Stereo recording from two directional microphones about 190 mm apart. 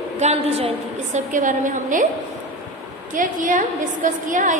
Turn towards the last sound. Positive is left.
turn(degrees=-40)  # may be behind; listen again after turning